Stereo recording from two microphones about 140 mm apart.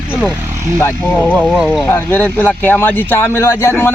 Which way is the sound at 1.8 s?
15° left (ahead or behind).